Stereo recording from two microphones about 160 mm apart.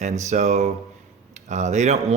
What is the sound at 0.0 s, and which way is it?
Speech, 45° right (ahead or behind).